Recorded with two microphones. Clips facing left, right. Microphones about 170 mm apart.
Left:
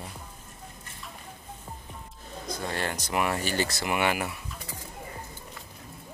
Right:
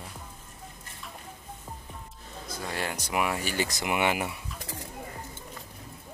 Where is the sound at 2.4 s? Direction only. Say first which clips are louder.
Left 2 dB; 5° right (ahead or behind); by 4.4 s 20° right (ahead or behind).